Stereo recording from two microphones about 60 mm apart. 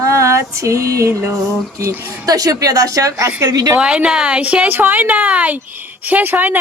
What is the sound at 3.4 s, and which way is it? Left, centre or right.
Speech, right.